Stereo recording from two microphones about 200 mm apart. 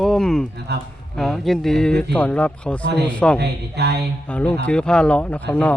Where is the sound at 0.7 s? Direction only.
55° right (ahead or behind).